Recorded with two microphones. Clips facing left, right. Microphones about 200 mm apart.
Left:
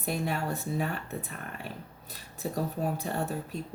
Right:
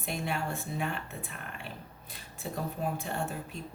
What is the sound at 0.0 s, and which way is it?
Speech, 40° left (ahead or behind).